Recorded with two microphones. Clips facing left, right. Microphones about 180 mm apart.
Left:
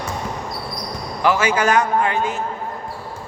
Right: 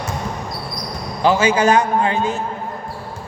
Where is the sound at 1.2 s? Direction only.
30° right (ahead or behind).